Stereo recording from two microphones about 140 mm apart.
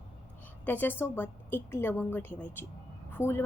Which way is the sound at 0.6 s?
15° left (ahead or behind).